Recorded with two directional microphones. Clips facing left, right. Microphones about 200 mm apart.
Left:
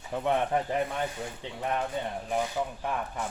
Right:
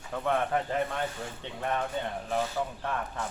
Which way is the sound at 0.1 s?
20° left (ahead or behind).